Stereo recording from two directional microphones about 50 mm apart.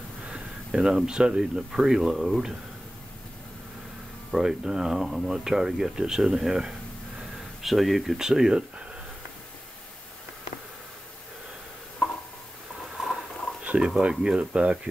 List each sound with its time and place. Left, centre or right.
0.2 s a sound: centre
1.4 s speech: centre
4.3 s speech: centre
8.2 s speech: centre
12.9 s patter: centre
13.7 s speech: centre